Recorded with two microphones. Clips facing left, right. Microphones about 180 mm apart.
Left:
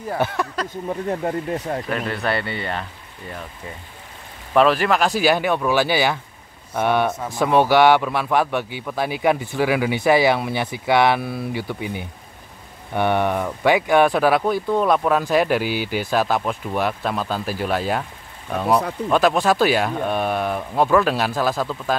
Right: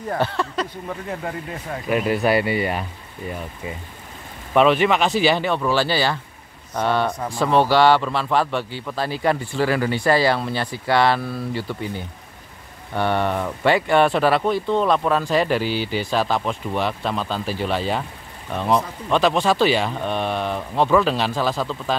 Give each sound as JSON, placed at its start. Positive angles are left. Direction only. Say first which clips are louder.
{"t": 0.1, "sound": "speech", "louder": "even", "side_deg": 15}
{"t": 1.2, "sound": "speech", "louder": "left 6 dB", "side_deg": 40}
{"t": 1.9, "sound": "speech", "louder": "right 9 dB", "side_deg": -15}
{"t": 19.0, "sound": "speech", "louder": "left 1 dB", "side_deg": 5}